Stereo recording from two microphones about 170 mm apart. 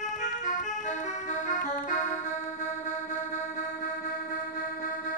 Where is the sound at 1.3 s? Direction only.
50° left (ahead or behind).